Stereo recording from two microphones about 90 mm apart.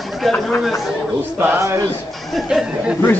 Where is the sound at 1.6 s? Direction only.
35° right (ahead or behind).